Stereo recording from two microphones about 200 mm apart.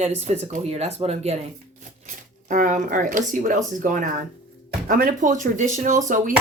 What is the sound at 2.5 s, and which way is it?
Speech, 40° right (ahead or behind).